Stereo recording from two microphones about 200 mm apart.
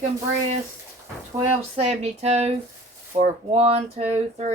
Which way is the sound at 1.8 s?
30° right (ahead or behind).